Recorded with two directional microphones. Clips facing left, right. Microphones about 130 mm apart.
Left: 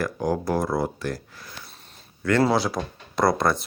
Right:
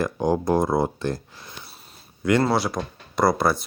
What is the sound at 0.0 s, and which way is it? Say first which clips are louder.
Speech: right 3 dB; 20° right (ahead or behind).